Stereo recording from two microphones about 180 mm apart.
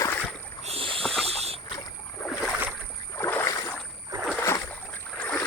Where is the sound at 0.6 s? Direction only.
30° right (ahead or behind).